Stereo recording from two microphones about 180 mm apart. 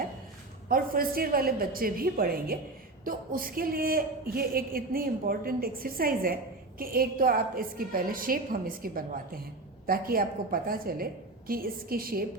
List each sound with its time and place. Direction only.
0.7 s a woman's voice: 55° right (ahead or behind)